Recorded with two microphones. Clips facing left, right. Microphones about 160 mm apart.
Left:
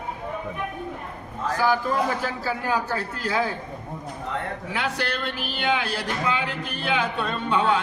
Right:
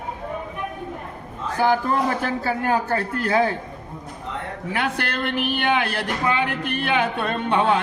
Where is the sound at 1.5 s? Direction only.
55° right (ahead or behind).